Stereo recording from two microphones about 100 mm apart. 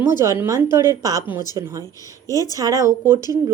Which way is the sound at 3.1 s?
40° left (ahead or behind).